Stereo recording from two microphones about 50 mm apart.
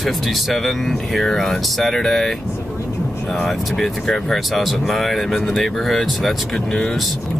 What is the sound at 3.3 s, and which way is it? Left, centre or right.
Speech, centre.